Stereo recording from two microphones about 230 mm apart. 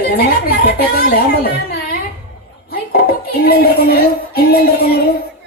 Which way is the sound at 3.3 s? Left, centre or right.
Left.